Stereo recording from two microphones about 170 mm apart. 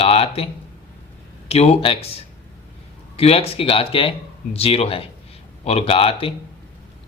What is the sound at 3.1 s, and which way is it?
Speech, 35° left (ahead or behind).